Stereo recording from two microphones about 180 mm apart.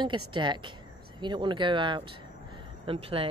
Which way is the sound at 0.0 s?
25° right (ahead or behind).